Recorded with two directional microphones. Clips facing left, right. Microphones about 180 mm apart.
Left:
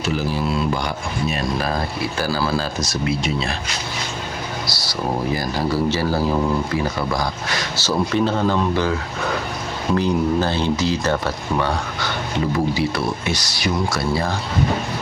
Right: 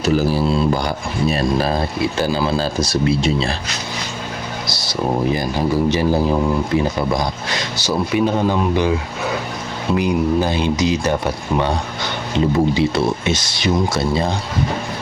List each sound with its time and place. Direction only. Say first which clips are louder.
0.0 s speech: right 5 dB; 40° right (ahead or behind)
4.7 s speech: right 5 dB; 20° right (ahead or behind)